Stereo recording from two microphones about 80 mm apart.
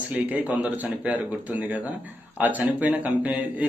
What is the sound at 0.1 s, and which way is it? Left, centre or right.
A man's voice, right.